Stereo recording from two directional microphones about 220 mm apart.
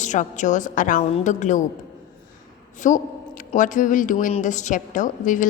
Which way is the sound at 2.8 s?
35° left (ahead or behind).